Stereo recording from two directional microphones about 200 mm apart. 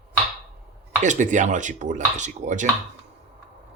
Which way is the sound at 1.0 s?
40° right (ahead or behind).